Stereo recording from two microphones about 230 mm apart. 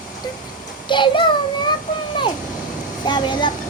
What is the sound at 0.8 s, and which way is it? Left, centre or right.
Speech, left.